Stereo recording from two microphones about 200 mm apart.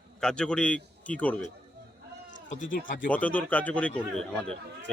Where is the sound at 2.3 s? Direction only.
65° left (ahead or behind).